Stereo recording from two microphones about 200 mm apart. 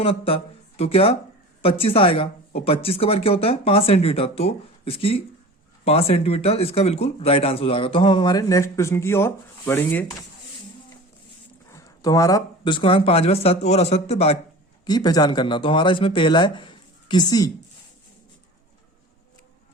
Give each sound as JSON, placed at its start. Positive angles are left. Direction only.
{"t": 0.0, "sound": "speech", "side_deg": 25}
{"t": 11.7, "sound": "speech", "side_deg": 15}
{"t": 14.8, "sound": "speech", "side_deg": 20}